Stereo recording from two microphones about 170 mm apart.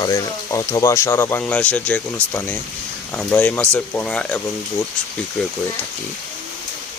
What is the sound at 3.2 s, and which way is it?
Speech, 5° left (ahead or behind).